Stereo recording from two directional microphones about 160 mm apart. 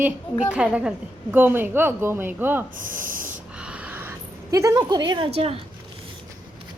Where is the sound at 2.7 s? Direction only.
60° right (ahead or behind).